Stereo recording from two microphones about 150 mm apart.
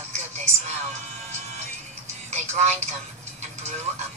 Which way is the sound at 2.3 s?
50° right (ahead or behind).